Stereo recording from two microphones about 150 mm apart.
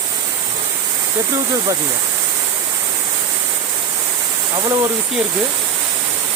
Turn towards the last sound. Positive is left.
turn(degrees=-25)  # may be behind; listen again after turning